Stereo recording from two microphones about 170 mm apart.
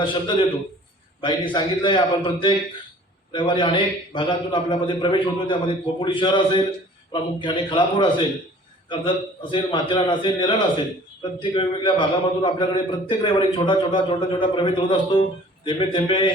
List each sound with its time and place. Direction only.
0.0 s a man's voice: 30° left (ahead or behind)